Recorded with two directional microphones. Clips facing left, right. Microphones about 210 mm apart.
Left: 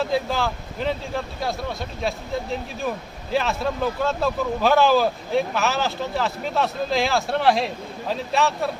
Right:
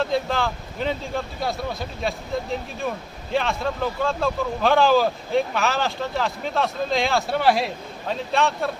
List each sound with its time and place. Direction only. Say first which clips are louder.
0.0 s speech: even; centre (ahead or behind)